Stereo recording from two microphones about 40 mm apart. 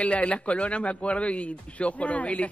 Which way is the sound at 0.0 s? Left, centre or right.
Left.